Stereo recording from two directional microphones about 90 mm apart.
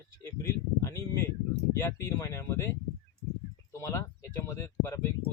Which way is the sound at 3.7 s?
35° left (ahead or behind).